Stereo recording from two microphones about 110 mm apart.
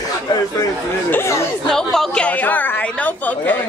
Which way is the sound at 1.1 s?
25° left (ahead or behind).